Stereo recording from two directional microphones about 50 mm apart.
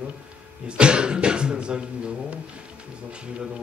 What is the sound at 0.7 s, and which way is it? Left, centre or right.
Speech, centre.